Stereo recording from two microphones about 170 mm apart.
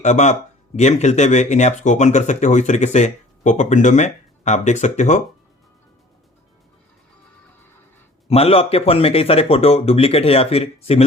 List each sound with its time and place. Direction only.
0.0 s speech: 45° left (ahead or behind)
8.3 s speech: 35° left (ahead or behind)